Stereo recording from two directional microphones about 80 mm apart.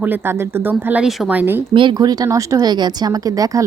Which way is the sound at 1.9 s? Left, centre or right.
Right.